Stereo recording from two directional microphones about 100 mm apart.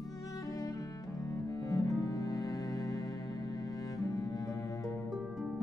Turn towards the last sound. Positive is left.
turn(degrees=-5)  # may be behind; listen again after turning